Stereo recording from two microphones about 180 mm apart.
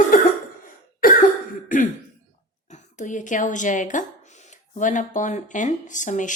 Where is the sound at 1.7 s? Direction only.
45° left (ahead or behind).